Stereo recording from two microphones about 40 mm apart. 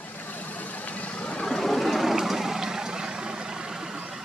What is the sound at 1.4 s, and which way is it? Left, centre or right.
Vehicle, centre.